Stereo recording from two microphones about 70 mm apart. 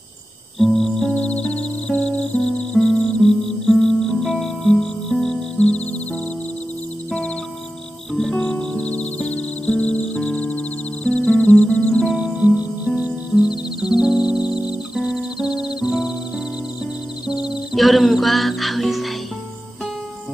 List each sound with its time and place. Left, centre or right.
0.6 s music: centre
1.1 s music: centre
8.1 s music: centre
12.1 s music: centre
17.3 s music: centre